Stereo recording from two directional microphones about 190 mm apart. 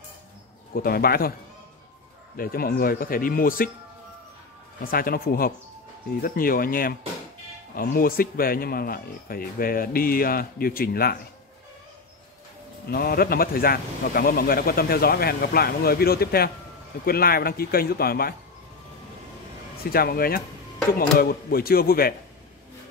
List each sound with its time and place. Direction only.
0.7 s a man's voice: 55° left (ahead or behind)
2.3 s a man's voice: 50° left (ahead or behind)
4.8 s a man's voice: 50° left (ahead or behind)
12.9 s a man's voice: 55° left (ahead or behind)
19.9 s a man's voice: 50° left (ahead or behind)